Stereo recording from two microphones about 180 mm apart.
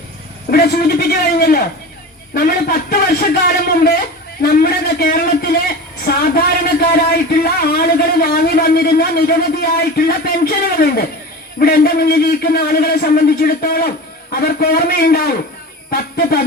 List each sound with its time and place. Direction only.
0.5 s a man's voice: 60° left (ahead or behind)